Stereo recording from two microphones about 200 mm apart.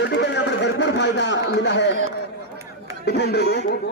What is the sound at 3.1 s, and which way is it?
Speech, 55° left (ahead or behind).